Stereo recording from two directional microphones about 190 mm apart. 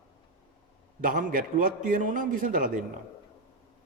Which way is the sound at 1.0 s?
45° right (ahead or behind).